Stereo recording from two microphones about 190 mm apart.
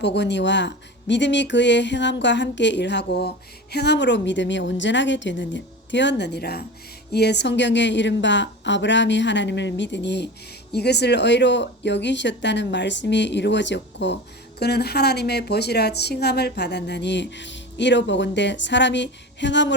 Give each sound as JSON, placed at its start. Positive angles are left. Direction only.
{"t": 0.0, "sound": "speech", "side_deg": 65}